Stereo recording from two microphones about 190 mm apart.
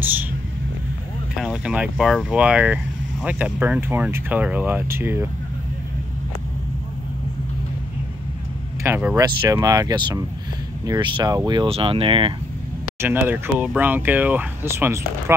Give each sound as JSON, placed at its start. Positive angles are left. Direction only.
{"t": 0.0, "sound": "vehicle", "side_deg": -10}
{"t": 1.4, "sound": "speech", "side_deg": -5}
{"t": 8.8, "sound": "speech", "side_deg": -10}
{"t": 13.0, "sound": "speech", "side_deg": -10}